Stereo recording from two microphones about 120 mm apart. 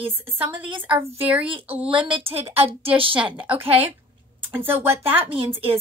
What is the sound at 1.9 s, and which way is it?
A woman's voice, 45° right (ahead or behind).